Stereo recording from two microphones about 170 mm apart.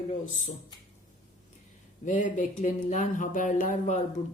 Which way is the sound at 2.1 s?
45° left (ahead or behind).